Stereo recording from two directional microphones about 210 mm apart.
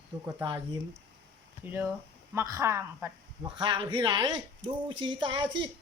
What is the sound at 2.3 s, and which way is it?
Speech, 15° right (ahead or behind).